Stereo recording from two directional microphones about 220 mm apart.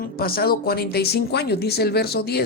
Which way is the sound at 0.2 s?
45° left (ahead or behind).